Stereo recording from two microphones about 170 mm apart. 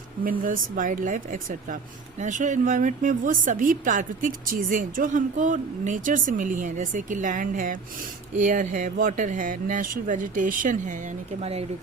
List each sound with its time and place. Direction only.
0.3 s speech: 55° right (ahead or behind); by 11.6 s 40° right (ahead or behind)